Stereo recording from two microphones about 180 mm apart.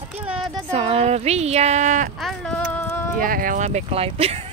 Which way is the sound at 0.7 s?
35° right (ahead or behind).